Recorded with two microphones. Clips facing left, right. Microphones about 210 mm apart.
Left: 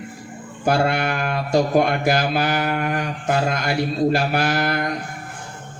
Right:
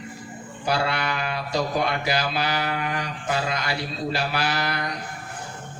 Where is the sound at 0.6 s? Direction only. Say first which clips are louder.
Left 6 dB; 50° left (ahead or behind).